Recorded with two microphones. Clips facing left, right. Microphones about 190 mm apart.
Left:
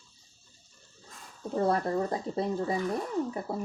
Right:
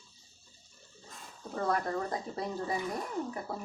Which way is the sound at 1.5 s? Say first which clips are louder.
Left 5 dB; 30° left (ahead or behind).